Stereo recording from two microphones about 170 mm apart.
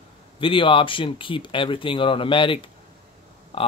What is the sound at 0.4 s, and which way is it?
Speech, 30° left (ahead or behind).